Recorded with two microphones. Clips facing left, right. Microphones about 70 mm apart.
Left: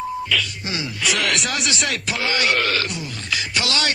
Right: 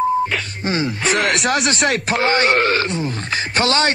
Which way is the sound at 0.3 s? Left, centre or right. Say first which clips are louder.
Right 3 dB; right.